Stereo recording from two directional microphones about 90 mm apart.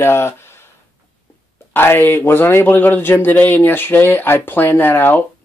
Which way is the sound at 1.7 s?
25° left (ahead or behind).